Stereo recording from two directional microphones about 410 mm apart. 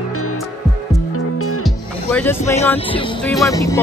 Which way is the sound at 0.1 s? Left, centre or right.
Left.